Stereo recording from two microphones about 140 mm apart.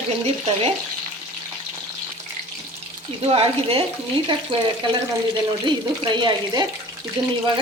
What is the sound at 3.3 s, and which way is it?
Speech, 40° right (ahead or behind).